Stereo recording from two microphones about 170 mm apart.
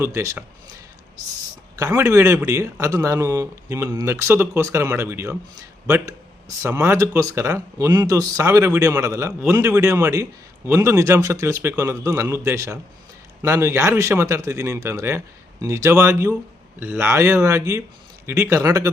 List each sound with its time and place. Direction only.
0.0 s speech: 15° right (ahead or behind)
1.8 s speech: 15° right (ahead or behind)
6.6 s speech: 15° right (ahead or behind)